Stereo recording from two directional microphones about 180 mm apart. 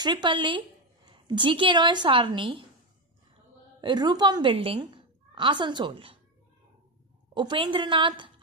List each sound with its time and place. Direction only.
0.0 s a woman's voice: 25° right (ahead or behind)
3.8 s a woman's voice: 25° right (ahead or behind)
7.3 s a woman's voice: 25° right (ahead or behind)